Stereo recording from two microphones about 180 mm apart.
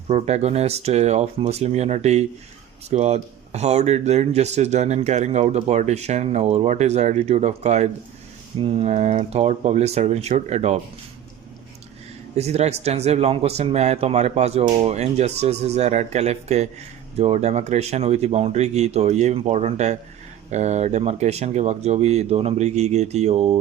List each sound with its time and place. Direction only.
0.1 s speech: 40° right (ahead or behind)
12.4 s speech: 35° right (ahead or behind)